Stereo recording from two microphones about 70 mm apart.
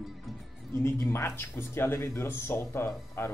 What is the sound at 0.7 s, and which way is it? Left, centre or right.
A man's voice, left.